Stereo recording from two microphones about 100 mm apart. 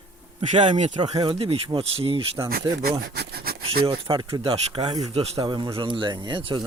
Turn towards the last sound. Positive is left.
turn(degrees=-50)  # may be behind; listen again after turning